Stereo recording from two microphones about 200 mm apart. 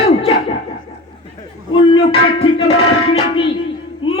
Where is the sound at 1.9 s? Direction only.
30° left (ahead or behind).